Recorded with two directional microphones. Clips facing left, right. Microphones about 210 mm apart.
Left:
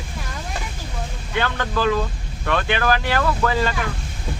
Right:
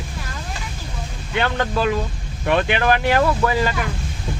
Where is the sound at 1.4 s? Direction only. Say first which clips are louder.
Right 2 dB; 25° right (ahead or behind).